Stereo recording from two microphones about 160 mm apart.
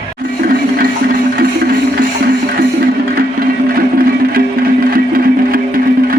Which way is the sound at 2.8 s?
65° right (ahead or behind).